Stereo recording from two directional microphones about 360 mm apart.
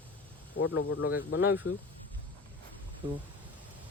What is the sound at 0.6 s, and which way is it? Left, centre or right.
Speech, left.